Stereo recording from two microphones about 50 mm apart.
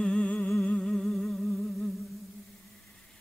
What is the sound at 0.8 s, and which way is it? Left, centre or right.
Humming, centre.